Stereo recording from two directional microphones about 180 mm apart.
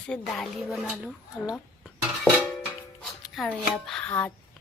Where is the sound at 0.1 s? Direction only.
Centre (ahead or behind).